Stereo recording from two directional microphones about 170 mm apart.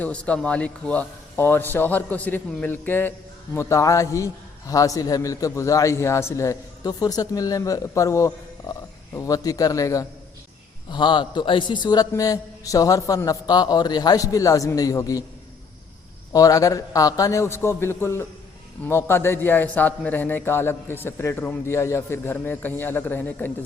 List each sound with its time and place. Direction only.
0.0 s a man's voice: 5° left (ahead or behind)
16.3 s a man's voice: 20° left (ahead or behind)